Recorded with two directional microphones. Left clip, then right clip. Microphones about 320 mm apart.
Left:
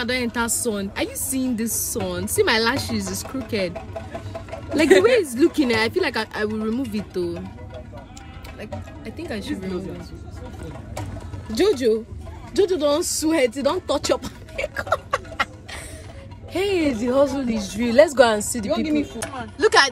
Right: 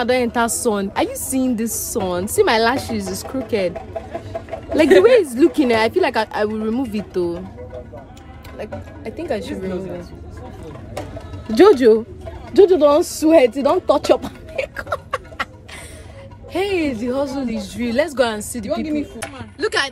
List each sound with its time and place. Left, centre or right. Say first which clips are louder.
0.0 s a woman's voice: right 6 dB; centre
5.0 s speech: right 5 dB; centre
8.5 s a woman's voice: right 6 dB; centre
11.5 s a woman's voice: right 8 dB; right
13.6 s a sound: right 6 dB; centre
16.5 s speech: right 1 dB; centre
18.7 s chopping: even; left
19.6 s speech: left 4 dB; centre